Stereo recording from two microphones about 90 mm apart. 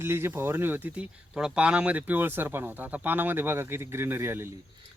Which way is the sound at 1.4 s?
10° right (ahead or behind).